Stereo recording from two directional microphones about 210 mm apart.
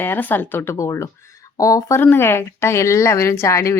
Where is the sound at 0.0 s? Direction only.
10° left (ahead or behind).